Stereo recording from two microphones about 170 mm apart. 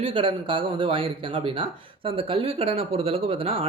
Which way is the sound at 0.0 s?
30° right (ahead or behind).